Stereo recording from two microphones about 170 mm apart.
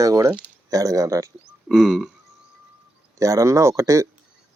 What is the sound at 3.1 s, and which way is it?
Speech, 20° right (ahead or behind).